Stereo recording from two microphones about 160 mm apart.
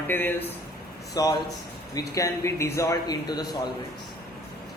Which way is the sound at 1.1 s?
25° left (ahead or behind).